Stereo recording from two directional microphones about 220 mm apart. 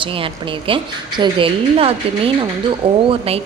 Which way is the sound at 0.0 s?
25° right (ahead or behind).